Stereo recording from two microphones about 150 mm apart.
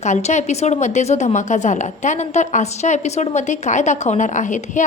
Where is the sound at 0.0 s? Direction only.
50° left (ahead or behind).